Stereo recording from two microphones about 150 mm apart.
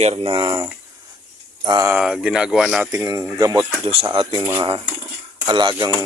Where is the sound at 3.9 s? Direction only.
35° right (ahead or behind).